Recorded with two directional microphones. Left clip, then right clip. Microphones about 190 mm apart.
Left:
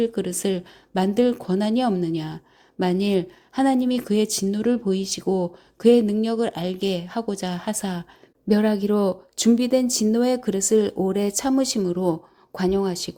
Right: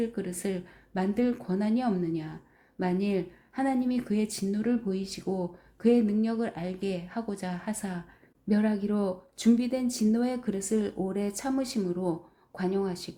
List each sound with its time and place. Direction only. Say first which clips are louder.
0.0 s speech: left 9 dB; 30° left (ahead or behind)